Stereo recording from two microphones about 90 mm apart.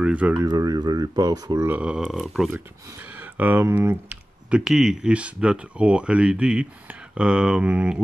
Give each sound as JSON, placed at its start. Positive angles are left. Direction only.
{"t": 0.0, "sound": "speech", "side_deg": -15}
{"t": 0.5, "sound": "speech", "side_deg": -45}
{"t": 1.7, "sound": "speech", "side_deg": -10}
{"t": 2.5, "sound": "speech", "side_deg": -20}